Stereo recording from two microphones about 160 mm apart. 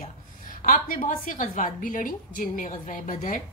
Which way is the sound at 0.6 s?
55° left (ahead or behind).